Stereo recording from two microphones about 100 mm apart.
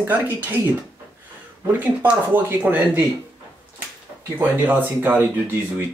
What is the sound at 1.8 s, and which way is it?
Speech, 15° right (ahead or behind).